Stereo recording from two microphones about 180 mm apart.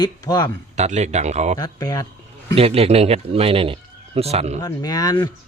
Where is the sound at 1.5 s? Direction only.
20° left (ahead or behind).